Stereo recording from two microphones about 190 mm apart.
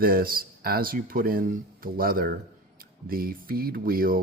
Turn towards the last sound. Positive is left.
turn(degrees=-50)  # may be behind; listen again after turning